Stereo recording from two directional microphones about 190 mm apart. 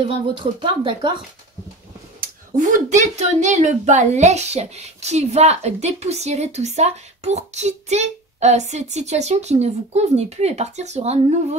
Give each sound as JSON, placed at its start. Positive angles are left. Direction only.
{"t": 0.4, "sound": "speech", "side_deg": -25}
{"t": 2.1, "sound": "speech", "side_deg": -45}